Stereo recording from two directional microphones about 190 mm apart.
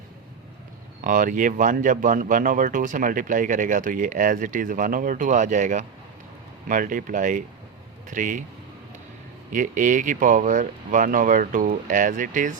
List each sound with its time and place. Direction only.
1.0 s speech: 45° right (ahead or behind)
9.5 s speech: 45° right (ahead or behind)